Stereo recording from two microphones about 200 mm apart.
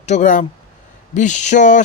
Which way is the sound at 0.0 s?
35° left (ahead or behind).